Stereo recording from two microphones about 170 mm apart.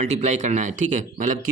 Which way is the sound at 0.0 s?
45° right (ahead or behind).